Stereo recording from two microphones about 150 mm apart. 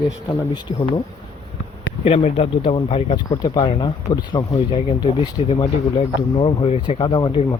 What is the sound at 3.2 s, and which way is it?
Speech, 30° left (ahead or behind).